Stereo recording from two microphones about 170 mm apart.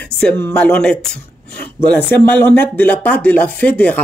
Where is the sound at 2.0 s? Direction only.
10° left (ahead or behind).